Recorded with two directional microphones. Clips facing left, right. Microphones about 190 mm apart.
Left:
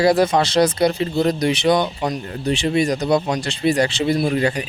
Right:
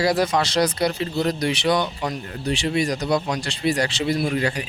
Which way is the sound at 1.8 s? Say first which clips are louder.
Left 4 dB; 40° left (ahead or behind).